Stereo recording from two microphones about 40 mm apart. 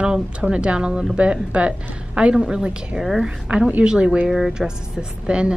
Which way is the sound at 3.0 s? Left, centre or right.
Centre.